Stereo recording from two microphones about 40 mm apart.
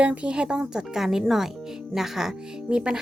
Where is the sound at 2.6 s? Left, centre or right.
Right.